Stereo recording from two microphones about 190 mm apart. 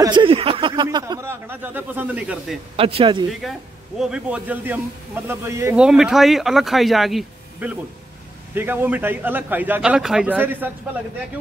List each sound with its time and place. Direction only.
0.0 s a man's voice: 25° right (ahead or behind); by 2.6 s 5° right (ahead or behind)
2.7 s speech: 30° right (ahead or behind)
4.0 s a man's voice: 5° right (ahead or behind)
5.9 s a man's voice: 5° right (ahead or behind)